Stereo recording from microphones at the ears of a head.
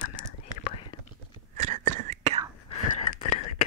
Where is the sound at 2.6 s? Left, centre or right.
Left.